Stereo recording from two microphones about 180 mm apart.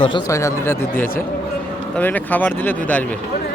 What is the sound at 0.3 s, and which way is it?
A man's voice, 15° left (ahead or behind).